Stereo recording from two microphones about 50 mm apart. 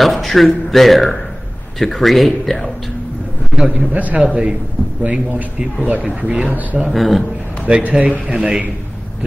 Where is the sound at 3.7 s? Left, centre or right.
Right.